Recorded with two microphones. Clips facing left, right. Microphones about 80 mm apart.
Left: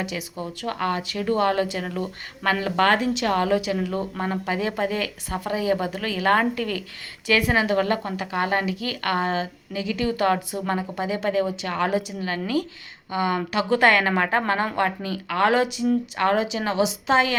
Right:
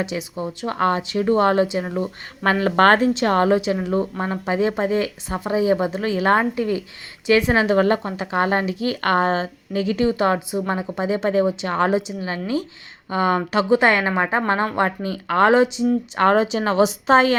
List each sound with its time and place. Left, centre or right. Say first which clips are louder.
0.0 s speech: right 4 dB; right
2.4 s speech: right 5 dB; right
10.1 s speech: right 2 dB; right
13.1 s speech: right 4 dB; right
13.7 s speech: right 1 dB; right
16.1 s speech: right 5 dB; right